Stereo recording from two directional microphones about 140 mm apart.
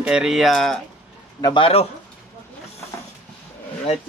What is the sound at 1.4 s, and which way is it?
Speech, 35° left (ahead or behind).